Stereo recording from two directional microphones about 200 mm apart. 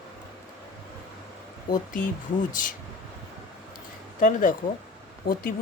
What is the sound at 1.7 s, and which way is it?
Speech, 40° left (ahead or behind).